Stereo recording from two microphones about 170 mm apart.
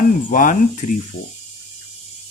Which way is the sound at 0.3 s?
50° left (ahead or behind).